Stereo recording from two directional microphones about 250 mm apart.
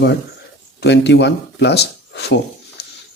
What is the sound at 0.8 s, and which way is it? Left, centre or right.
Speech, left.